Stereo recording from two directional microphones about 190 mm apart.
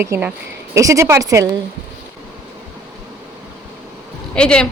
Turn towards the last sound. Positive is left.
turn(degrees=5)  # may be behind; listen again after turning